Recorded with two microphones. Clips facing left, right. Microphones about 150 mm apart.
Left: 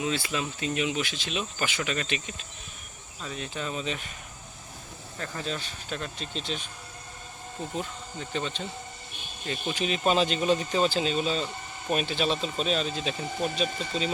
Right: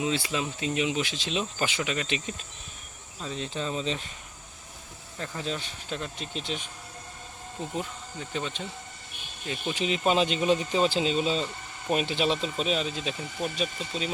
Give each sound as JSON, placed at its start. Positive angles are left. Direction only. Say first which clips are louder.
{"t": 0.0, "sound": "speech", "louder": "right 1 dB", "side_deg": -20}
{"t": 5.1, "sound": "speech", "louder": "right 1 dB", "side_deg": -15}
{"t": 7.7, "sound": "speech", "louder": "even", "side_deg": -10}